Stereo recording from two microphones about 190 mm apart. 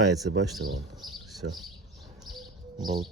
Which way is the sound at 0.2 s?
90° right.